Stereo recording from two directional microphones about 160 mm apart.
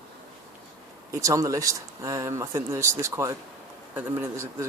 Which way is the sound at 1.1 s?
20° right (ahead or behind).